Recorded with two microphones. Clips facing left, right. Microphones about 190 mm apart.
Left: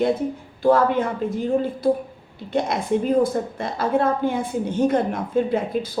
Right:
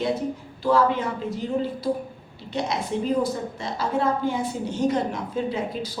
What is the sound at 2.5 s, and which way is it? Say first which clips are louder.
A woman's voice: left 5 dB; 55° left (ahead or behind).